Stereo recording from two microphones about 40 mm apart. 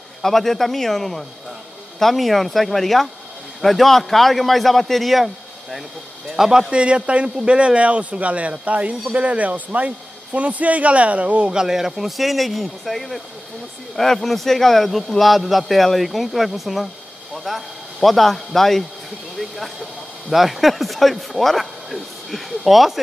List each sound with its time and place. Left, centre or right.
0.2 s a man's voice: centre
6.7 s speech: right
11.5 s speech: centre
12.2 s a man's voice: centre